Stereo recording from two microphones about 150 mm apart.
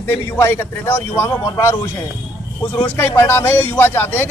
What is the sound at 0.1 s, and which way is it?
A man's voice, 15° left (ahead or behind).